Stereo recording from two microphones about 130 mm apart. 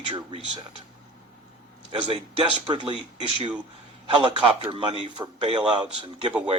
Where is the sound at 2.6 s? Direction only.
35° right (ahead or behind).